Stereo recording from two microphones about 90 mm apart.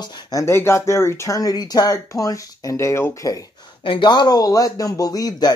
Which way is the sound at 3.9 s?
60° left (ahead or behind).